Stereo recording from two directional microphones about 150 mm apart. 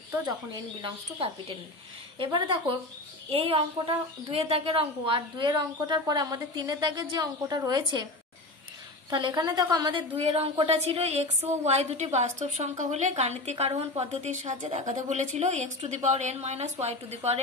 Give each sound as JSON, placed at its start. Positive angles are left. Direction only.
{"t": 0.8, "sound": "a woman's voice", "side_deg": -35}
{"t": 9.1, "sound": "a woman's voice", "side_deg": -30}